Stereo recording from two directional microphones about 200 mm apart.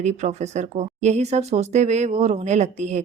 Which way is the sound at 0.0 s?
35° right (ahead or behind).